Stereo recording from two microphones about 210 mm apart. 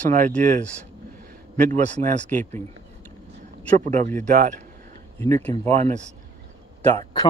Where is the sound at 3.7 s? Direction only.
35° right (ahead or behind).